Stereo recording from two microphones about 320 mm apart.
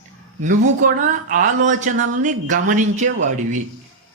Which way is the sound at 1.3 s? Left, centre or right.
Right.